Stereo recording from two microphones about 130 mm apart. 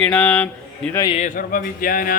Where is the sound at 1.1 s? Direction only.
80° left.